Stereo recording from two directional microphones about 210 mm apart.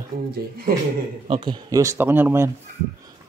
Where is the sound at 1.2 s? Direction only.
25° right (ahead or behind).